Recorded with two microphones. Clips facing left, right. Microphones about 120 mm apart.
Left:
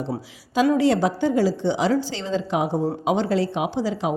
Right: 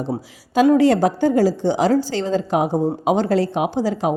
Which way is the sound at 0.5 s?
50° right (ahead or behind).